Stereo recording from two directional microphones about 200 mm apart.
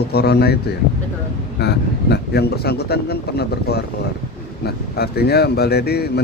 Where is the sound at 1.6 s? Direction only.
55° left (ahead or behind).